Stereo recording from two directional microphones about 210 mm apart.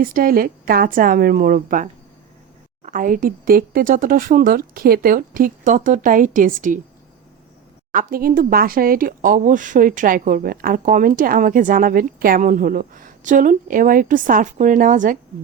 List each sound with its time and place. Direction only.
0.0 s speech: 45° right (ahead or behind)
7.9 s speech: 40° right (ahead or behind)